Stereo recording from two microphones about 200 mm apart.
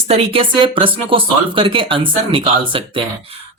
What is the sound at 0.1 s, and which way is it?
Speech, 25° right (ahead or behind).